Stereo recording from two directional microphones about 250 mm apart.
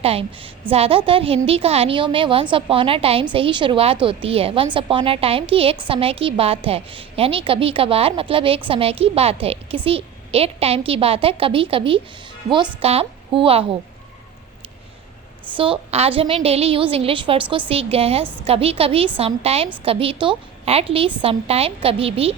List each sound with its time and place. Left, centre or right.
0.0 s a woman's voice: right
15.5 s a woman's voice: right